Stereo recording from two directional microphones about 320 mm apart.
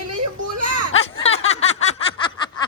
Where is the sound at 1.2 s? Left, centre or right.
Centre.